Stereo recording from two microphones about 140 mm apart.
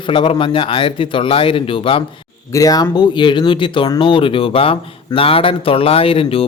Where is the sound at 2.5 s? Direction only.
25° left (ahead or behind).